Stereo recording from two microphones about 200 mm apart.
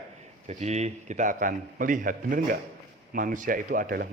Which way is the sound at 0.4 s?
35° right (ahead or behind).